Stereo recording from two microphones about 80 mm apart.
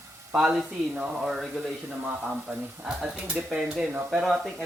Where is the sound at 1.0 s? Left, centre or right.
Centre.